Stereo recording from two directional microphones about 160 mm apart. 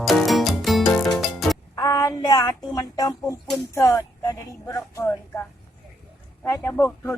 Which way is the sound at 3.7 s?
20° left (ahead or behind).